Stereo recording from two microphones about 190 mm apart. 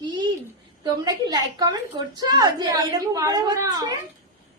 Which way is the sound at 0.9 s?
20° right (ahead or behind).